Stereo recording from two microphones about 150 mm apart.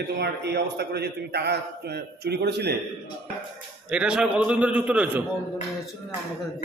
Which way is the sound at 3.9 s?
5° right (ahead or behind).